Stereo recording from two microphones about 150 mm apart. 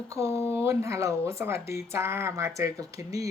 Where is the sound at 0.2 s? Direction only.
20° right (ahead or behind).